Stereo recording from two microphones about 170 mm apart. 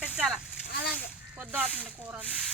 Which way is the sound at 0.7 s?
65° left (ahead or behind).